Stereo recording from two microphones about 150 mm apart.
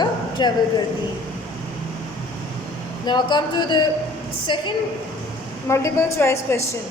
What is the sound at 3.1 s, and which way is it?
Speech, 30° left (ahead or behind).